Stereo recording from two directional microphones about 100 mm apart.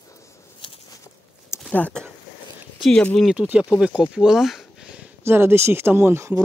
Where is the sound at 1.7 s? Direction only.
10° left (ahead or behind).